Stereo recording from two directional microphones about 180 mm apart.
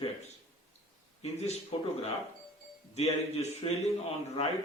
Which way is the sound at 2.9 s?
35° left (ahead or behind).